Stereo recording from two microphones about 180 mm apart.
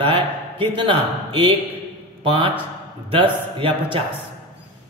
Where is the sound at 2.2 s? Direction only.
30° right (ahead or behind).